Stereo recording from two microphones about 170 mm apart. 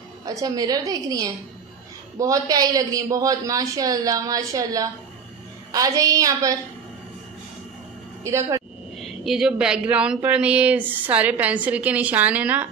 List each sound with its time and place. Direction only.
0.2 s a man's voice: 20° right (ahead or behind)
8.2 s speech: 15° right (ahead or behind)
9.0 s speech: centre (ahead or behind)